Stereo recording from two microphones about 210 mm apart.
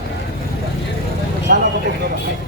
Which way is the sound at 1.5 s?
45° right (ahead or behind).